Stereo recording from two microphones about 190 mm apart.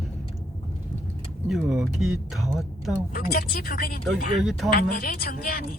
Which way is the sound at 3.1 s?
50° left (ahead or behind).